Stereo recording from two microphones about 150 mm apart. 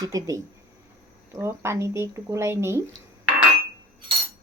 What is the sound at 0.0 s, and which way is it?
Speech, 25° right (ahead or behind).